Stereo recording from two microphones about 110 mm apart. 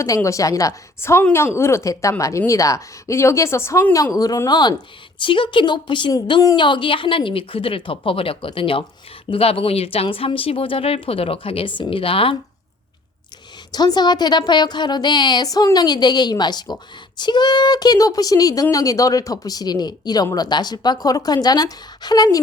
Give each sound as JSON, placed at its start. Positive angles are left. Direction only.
{"t": 0.0, "sound": "speech", "side_deg": 30}
{"t": 5.2, "sound": "a woman's voice", "side_deg": 50}
{"t": 13.7, "sound": "a woman's voice", "side_deg": 40}